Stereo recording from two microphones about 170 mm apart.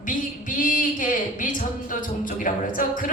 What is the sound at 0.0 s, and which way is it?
A woman's voice, 50° left (ahead or behind).